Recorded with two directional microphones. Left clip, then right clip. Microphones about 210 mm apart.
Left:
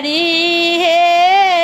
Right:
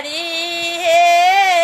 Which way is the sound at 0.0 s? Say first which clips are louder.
Left 7 dB; 20° right (ahead or behind).